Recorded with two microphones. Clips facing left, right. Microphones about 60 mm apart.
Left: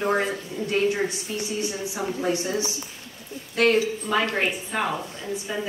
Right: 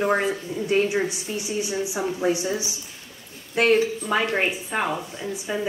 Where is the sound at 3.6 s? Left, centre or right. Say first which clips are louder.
Right 1 dB; centre.